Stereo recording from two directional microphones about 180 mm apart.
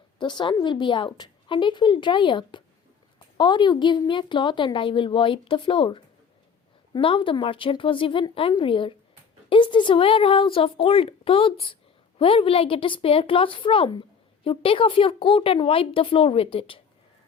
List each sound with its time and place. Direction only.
0.2 s a woman's voice: 25° left (ahead or behind)